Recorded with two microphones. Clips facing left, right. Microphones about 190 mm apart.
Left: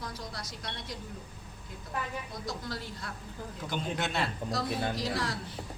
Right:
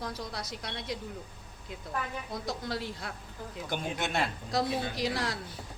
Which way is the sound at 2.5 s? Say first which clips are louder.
Right 4 dB; 65° right (ahead or behind).